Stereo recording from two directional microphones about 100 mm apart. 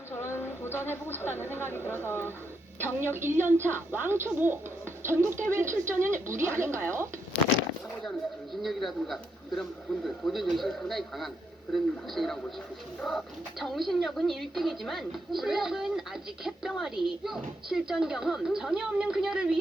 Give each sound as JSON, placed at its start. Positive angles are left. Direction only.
{"t": 0.2, "sound": "a sound", "side_deg": 25}
{"t": 1.4, "sound": "speech", "side_deg": 20}
{"t": 2.8, "sound": "speech", "side_deg": -25}
{"t": 8.6, "sound": "speech", "side_deg": 0}